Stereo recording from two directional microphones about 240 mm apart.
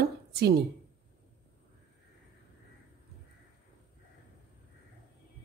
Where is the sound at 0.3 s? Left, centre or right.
Right.